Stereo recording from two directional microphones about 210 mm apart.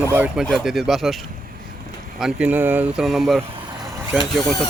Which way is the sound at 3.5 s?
20° right (ahead or behind).